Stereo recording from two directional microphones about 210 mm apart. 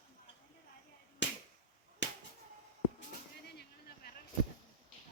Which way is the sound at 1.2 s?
60° left (ahead or behind).